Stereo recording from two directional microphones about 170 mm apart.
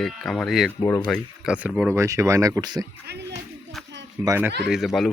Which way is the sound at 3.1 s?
75° right (ahead or behind).